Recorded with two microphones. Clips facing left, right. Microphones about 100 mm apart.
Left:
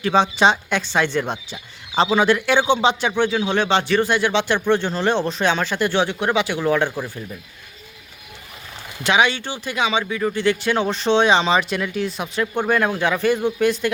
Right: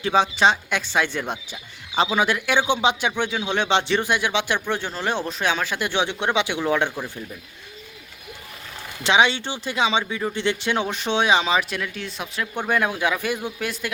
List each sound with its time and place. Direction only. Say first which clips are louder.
0.1 s speech: left 2 dB; 5° right (ahead or behind)
6.8 s speech: left 3 dB; 5° left (ahead or behind)
9.0 s speech: left 1 dB; 25° right (ahead or behind); by 13.9 s 5° right (ahead or behind)